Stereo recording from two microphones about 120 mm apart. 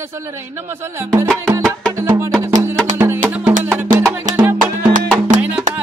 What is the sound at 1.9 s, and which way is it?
Music, 20° right (ahead or behind).